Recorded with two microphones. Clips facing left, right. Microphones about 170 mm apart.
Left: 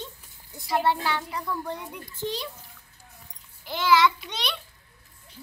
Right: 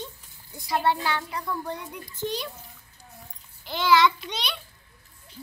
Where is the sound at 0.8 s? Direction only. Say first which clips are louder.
Right 1 dB; 5° left (ahead or behind).